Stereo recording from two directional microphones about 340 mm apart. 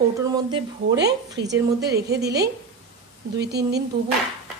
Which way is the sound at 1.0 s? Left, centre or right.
Right.